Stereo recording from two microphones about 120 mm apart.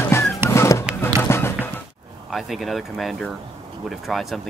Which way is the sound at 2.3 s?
Centre (ahead or behind).